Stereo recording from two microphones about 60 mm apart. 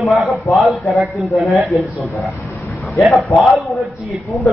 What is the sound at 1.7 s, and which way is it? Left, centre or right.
Speech, centre.